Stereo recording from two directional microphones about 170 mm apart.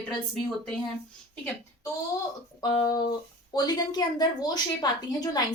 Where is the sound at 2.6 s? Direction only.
25° left (ahead or behind).